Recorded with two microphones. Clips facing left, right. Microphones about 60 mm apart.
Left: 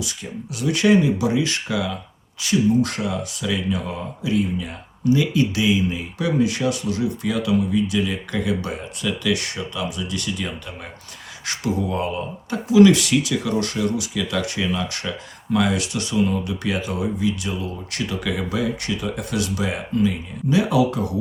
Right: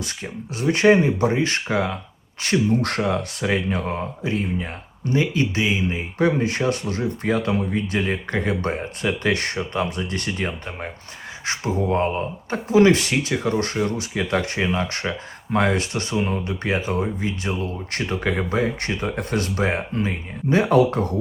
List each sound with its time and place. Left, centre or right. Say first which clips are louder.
0.0 s speech: even; right
2.4 s speech: left 2 dB; right